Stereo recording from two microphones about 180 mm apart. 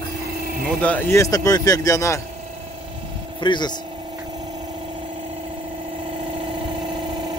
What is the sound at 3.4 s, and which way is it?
Speech, 25° left (ahead or behind).